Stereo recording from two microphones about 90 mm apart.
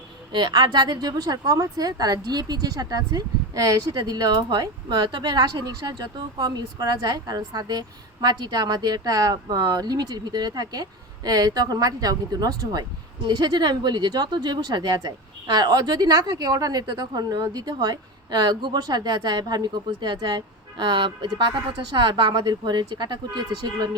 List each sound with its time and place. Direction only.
0.3 s speech: 55° right (ahead or behind)